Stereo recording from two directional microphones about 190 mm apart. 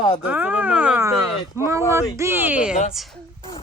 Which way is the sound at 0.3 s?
10° right (ahead or behind).